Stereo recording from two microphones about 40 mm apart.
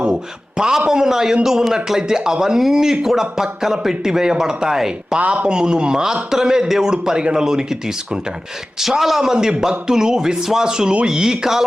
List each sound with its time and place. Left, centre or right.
0.0 s a man's voice: centre
9.3 s speech: centre